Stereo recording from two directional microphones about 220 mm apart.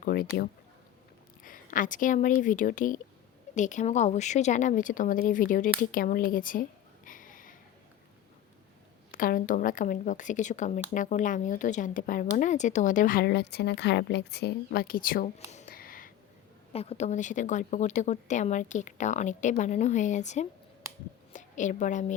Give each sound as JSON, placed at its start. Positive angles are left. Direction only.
{"t": 0.0, "sound": "a sound", "side_deg": 40}
{"t": 1.5, "sound": "speech", "side_deg": 40}
{"t": 9.1, "sound": "speech", "side_deg": 40}
{"t": 16.7, "sound": "a woman's voice", "side_deg": 25}